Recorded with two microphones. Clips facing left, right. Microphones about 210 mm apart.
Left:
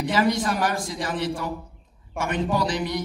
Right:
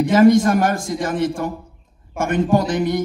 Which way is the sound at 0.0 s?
45° right (ahead or behind).